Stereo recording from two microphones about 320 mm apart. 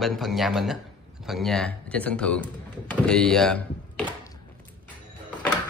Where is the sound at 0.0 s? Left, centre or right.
Centre.